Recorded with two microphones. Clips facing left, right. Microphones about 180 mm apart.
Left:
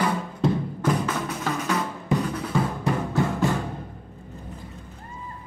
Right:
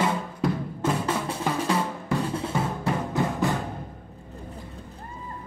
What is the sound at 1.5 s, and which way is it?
Drum, 30° right (ahead or behind).